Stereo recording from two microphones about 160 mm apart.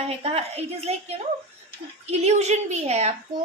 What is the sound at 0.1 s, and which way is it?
A woman's voice, 40° right (ahead or behind).